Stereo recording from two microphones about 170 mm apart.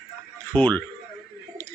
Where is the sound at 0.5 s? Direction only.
10° left (ahead or behind).